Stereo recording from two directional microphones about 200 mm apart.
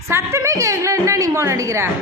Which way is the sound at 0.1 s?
15° right (ahead or behind).